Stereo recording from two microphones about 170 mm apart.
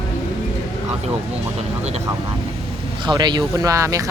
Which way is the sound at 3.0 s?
25° right (ahead or behind).